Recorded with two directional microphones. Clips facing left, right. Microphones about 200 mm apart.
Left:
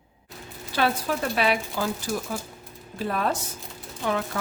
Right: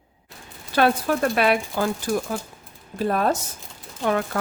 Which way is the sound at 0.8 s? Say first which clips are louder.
Right 5 dB; 55° right (ahead or behind).